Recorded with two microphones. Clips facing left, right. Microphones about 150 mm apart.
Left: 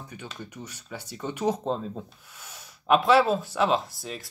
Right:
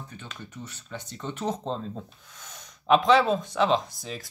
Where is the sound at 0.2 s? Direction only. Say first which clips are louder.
Left 2 dB; 10° left (ahead or behind).